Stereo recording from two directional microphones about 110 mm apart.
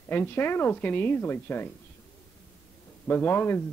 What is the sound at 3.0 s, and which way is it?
Speech, 15° left (ahead or behind).